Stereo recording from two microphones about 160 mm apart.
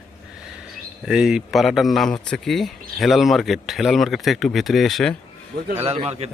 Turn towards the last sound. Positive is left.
turn(degrees=-40)  # may be behind; listen again after turning